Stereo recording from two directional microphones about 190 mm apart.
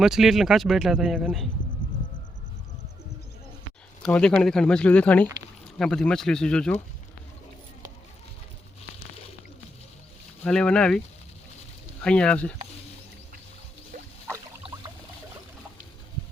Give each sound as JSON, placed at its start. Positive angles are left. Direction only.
{"t": 0.0, "sound": "speech", "side_deg": 0}
{"t": 4.0, "sound": "speech", "side_deg": 5}
{"t": 10.4, "sound": "speech", "side_deg": 5}
{"t": 13.9, "sound": "rodents", "side_deg": -45}
{"t": 14.3, "sound": "a sound", "side_deg": -20}